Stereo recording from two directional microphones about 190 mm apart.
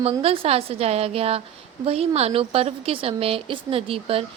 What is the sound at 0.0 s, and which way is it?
A woman's voice, 30° right (ahead or behind).